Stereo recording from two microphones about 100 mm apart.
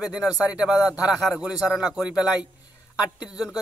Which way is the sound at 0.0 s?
10° right (ahead or behind).